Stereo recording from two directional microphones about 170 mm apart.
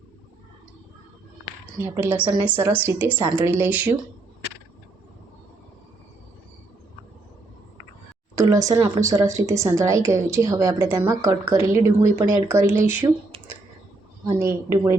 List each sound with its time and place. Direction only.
1.8 s a woman's voice: 10° right (ahead or behind)
8.4 s a woman's voice: 20° right (ahead or behind)
14.3 s a woman's voice: 15° right (ahead or behind)